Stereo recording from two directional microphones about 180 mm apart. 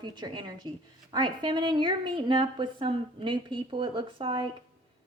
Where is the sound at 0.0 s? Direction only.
25° right (ahead or behind).